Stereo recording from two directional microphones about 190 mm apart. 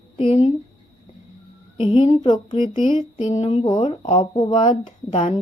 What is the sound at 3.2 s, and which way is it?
Music, 40° left (ahead or behind).